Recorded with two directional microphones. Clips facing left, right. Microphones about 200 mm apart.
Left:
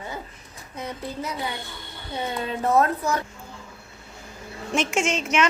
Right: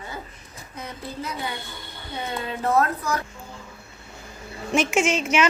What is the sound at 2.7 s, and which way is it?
Speech, 25° left (ahead or behind).